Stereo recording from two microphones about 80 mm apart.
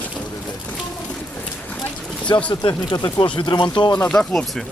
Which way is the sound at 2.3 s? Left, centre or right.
Left.